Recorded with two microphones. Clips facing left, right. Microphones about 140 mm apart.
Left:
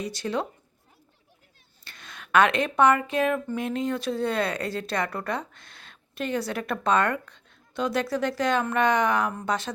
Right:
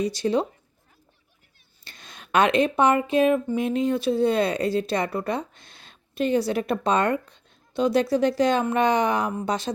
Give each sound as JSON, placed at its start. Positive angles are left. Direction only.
{"t": 0.0, "sound": "a woman's voice", "side_deg": -35}
{"t": 2.0, "sound": "speech", "side_deg": -30}
{"t": 4.2, "sound": "a woman's voice", "side_deg": -15}
{"t": 4.4, "sound": "a woman's voice", "side_deg": -30}
{"t": 4.7, "sound": "a woman's voice", "side_deg": -15}
{"t": 5.4, "sound": "a sound", "side_deg": -30}
{"t": 6.5, "sound": "a woman's voice", "side_deg": -25}